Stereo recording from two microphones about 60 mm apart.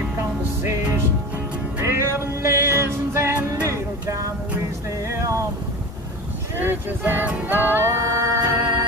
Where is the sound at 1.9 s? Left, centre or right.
Right.